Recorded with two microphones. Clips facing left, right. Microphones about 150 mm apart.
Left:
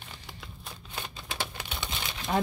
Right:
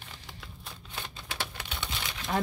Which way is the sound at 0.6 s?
15° left (ahead or behind).